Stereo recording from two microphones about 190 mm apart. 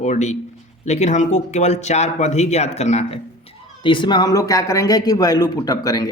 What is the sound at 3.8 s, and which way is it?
A man's voice, 25° left (ahead or behind).